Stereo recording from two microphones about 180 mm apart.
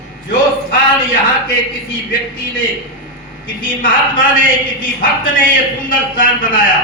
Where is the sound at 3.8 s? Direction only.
50° left (ahead or behind).